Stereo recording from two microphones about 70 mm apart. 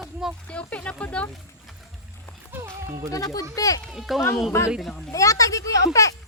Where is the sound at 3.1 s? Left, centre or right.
Left.